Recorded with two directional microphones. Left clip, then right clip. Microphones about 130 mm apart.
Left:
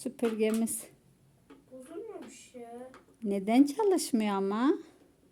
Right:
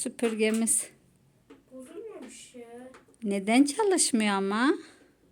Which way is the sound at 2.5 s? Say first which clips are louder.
Left 1 dB; 25° left (ahead or behind).